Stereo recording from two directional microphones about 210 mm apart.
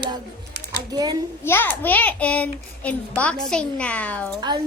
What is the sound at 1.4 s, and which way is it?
A child's voice, 10° left (ahead or behind).